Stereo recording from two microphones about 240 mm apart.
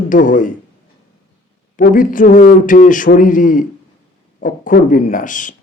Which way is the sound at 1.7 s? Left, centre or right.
Left.